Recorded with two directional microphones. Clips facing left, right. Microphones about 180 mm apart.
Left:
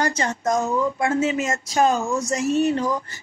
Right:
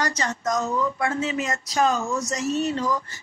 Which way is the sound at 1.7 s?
50° left (ahead or behind).